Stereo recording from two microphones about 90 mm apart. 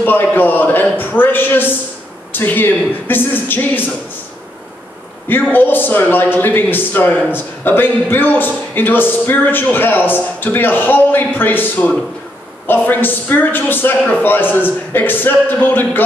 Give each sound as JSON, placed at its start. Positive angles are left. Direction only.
{"t": 0.0, "sound": "a man's voice", "side_deg": 20}
{"t": 5.3, "sound": "a man's voice", "side_deg": 20}